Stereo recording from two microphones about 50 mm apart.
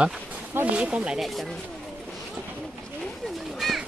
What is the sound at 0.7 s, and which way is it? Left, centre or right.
Speech, right.